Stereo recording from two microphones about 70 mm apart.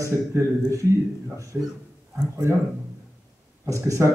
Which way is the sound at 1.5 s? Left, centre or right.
Centre.